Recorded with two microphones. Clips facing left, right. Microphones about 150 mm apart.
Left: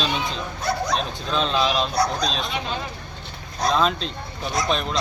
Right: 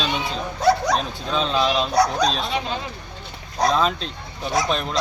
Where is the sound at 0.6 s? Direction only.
90° right.